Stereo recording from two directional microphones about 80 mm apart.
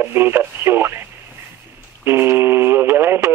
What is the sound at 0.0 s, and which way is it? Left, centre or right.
Speech, right.